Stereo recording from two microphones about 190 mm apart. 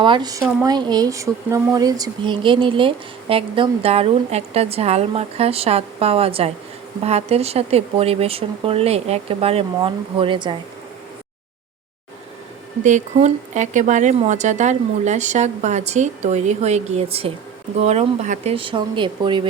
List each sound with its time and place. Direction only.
0.0 s speech: 25° right (ahead or behind)
12.8 s speech: 40° right (ahead or behind)